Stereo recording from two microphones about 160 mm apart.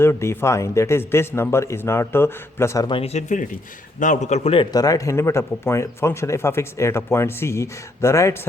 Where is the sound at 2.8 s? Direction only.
35° left (ahead or behind).